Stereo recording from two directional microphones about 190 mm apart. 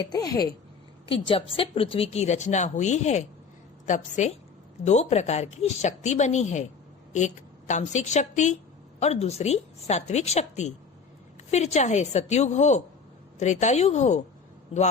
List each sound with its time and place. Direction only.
0.0 s a woman's voice: 20° left (ahead or behind); by 6.7 s 40° left (ahead or behind)
7.7 s a woman's voice: 40° left (ahead or behind)